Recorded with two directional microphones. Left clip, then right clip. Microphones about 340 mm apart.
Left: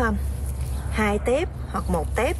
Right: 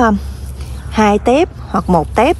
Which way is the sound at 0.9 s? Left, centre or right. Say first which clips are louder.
Right 11 dB; centre.